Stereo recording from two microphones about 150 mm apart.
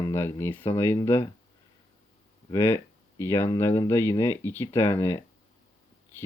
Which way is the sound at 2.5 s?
15° left (ahead or behind).